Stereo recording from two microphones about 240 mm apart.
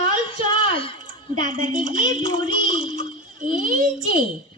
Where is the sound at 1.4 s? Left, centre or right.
Right.